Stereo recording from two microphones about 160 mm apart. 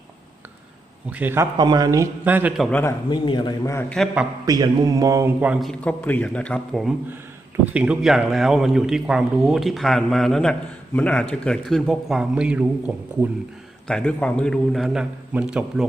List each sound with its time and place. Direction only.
1.1 s a man's voice: 10° right (ahead or behind)
1.5 s speech: 25° right (ahead or behind)
2.2 s a man's voice: 10° right (ahead or behind)
3.1 s a man's voice: 25° left (ahead or behind)
4.4 s speech: 25° right (ahead or behind)
5.4 s a man's voice: 5° right (ahead or behind)
7.5 s a man's voice: 10° right (ahead or behind)
13.8 s a man's voice: 5° left (ahead or behind)